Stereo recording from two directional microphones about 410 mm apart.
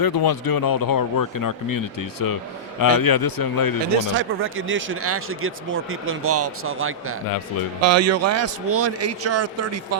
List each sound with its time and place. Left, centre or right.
0.0 s a man's voice: left
3.9 s a man's voice: right